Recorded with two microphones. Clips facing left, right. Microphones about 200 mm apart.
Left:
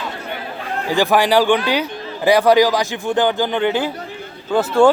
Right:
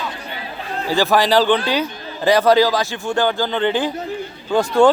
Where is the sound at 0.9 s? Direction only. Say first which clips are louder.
Left 1 dB; 15° left (ahead or behind).